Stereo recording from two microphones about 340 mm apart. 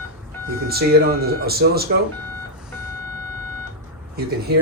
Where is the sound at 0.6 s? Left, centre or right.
Right.